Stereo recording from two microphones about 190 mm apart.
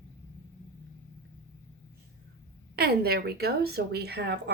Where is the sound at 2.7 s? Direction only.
55° right (ahead or behind).